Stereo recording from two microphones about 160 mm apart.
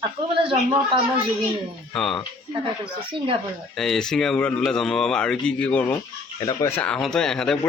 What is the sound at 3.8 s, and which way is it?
A man's voice, 5° left (ahead or behind).